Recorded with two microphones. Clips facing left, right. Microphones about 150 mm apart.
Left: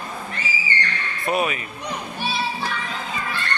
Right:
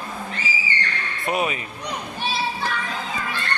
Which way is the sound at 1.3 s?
15° right (ahead or behind).